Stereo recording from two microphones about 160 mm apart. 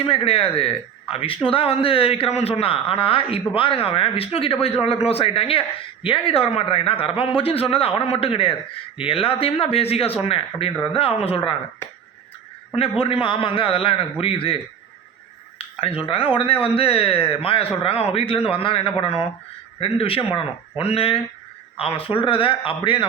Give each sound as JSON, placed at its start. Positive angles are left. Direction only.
{"t": 0.0, "sound": "a woman's voice", "side_deg": 35}
{"t": 12.7, "sound": "a woman's voice", "side_deg": 35}